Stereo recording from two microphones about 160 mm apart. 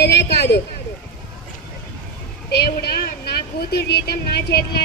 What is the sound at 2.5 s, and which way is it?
A woman's voice, 90° left.